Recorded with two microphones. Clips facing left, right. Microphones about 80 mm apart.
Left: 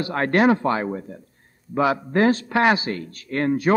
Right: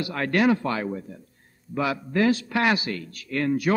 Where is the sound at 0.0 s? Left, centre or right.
Left.